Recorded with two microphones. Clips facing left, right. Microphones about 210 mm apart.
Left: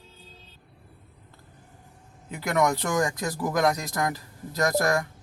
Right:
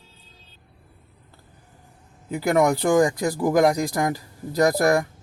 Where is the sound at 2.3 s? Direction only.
30° right (ahead or behind).